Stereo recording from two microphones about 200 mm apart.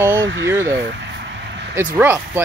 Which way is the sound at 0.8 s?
60° right (ahead or behind).